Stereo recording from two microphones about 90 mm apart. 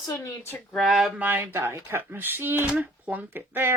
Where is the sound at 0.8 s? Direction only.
Centre (ahead or behind).